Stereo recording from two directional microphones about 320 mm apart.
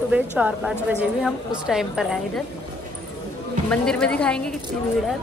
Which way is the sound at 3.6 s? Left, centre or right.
Centre.